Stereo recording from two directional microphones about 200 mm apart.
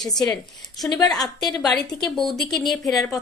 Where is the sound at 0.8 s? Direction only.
20° left (ahead or behind).